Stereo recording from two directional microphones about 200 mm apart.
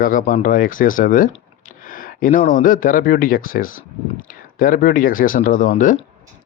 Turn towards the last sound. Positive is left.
turn(degrees=40)  # may be behind; listen again after turning